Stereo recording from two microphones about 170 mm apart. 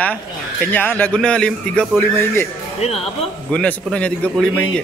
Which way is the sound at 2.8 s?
40° left (ahead or behind).